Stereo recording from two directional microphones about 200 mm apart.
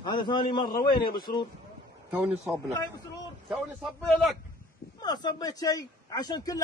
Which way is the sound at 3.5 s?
Centre (ahead or behind).